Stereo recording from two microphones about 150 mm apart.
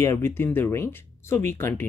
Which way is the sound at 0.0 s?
15° left (ahead or behind).